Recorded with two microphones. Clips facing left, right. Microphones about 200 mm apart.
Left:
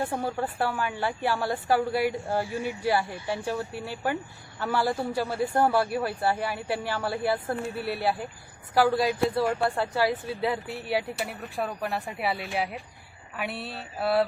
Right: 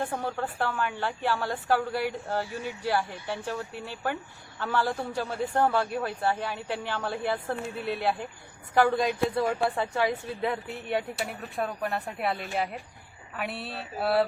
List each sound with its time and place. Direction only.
0.0 s a woman's voice: 10° left (ahead or behind)